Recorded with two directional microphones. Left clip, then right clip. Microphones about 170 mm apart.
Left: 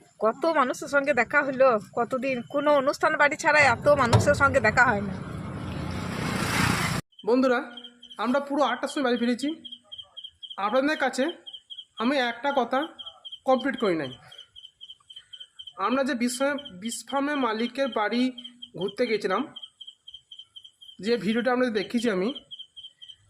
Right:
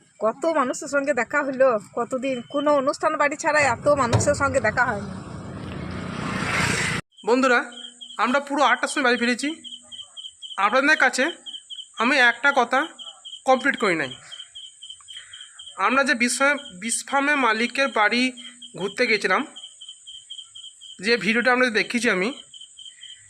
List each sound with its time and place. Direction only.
0.2 s speech: 10° right (ahead or behind)
4.7 s speech: 20° left (ahead or behind)
7.3 s speech: 5° right (ahead or behind)
15.8 s speech: centre (ahead or behind)
21.0 s speech: 5° right (ahead or behind)